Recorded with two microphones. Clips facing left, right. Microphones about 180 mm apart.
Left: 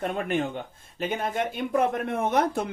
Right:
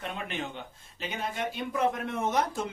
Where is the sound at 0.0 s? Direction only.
50° left (ahead or behind).